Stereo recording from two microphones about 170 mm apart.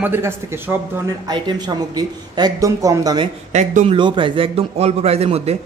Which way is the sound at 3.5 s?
45° right (ahead or behind).